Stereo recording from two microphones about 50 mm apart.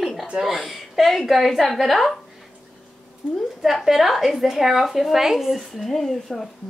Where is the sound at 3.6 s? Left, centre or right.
Centre.